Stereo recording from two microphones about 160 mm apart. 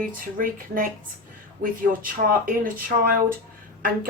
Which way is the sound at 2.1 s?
60° right (ahead or behind).